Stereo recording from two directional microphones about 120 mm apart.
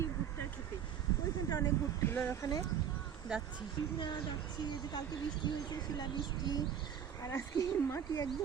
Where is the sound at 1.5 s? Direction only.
25° left (ahead or behind).